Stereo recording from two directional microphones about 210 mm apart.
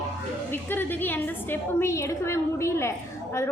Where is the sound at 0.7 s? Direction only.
10° left (ahead or behind).